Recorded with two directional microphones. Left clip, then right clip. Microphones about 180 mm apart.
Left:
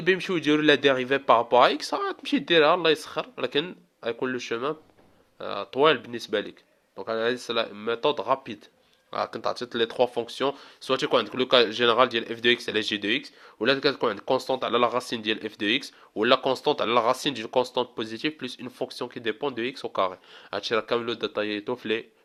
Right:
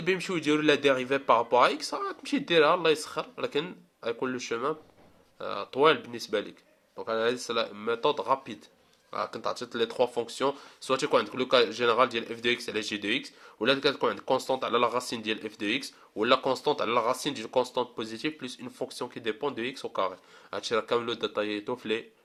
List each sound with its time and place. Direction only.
0.0 s a man's voice: 30° left (ahead or behind)